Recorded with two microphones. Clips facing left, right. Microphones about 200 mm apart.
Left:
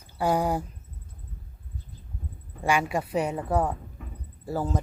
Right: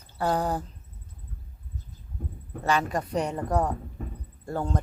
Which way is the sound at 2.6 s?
10° left (ahead or behind).